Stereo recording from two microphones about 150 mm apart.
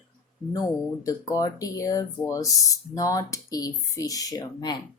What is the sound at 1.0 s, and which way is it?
Speech, 20° left (ahead or behind).